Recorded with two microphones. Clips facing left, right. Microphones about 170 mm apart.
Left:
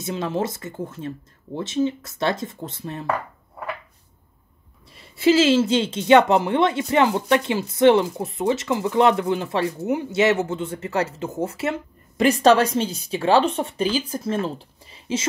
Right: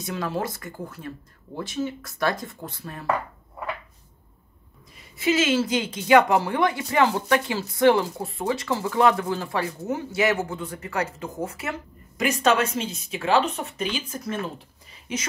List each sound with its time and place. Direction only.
0.0 s speech: 20° left (ahead or behind)
5.1 s speech: 30° left (ahead or behind)